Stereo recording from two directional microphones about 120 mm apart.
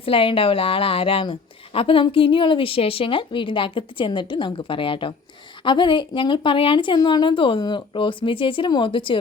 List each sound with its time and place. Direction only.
0.0 s a woman's voice: 50° left (ahead or behind)